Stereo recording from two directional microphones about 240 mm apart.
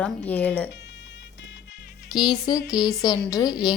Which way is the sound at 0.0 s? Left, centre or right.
Centre.